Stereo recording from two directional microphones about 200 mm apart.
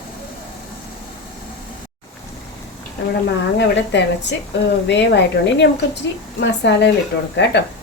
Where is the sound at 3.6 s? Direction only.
60° left (ahead or behind).